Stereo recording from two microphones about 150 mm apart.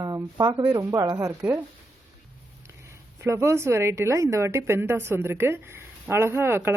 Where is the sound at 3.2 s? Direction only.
20° right (ahead or behind).